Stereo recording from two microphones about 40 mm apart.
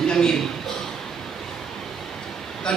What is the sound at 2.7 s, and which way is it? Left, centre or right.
Speech, left.